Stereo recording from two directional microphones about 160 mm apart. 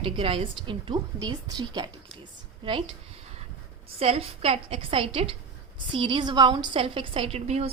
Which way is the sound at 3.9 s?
35° right (ahead or behind).